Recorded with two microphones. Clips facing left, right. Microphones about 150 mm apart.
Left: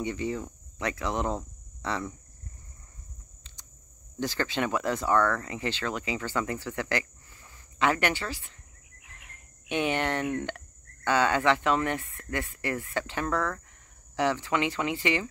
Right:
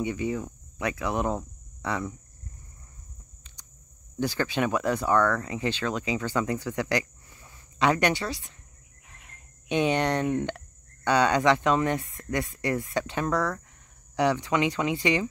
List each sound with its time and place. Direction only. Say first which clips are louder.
0.0 s cricket: right 2 dB; 15° right (ahead or behind)
4.2 s speech: right 3 dB; 15° right (ahead or behind)
9.1 s cricket: even; 20° right (ahead or behind)
11.1 s speech: right 2 dB; 15° right (ahead or behind)